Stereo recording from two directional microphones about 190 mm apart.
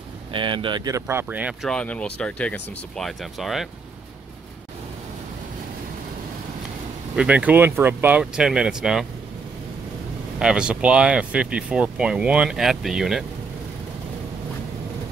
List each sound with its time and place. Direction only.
0.3 s speech: 25° right (ahead or behind); by 1.7 s 10° right (ahead or behind)
1.7 s speech: 5° left (ahead or behind)
7.2 s speech: 5° right (ahead or behind)
10.4 s speech: 5° right (ahead or behind)